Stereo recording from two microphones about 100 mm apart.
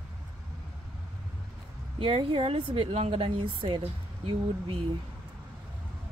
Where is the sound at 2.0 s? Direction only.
65° right (ahead or behind).